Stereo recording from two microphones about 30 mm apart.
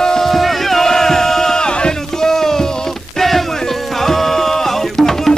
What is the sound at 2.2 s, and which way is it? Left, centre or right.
Music, centre.